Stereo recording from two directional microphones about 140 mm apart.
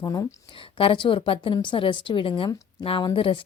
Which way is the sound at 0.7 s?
40° left (ahead or behind).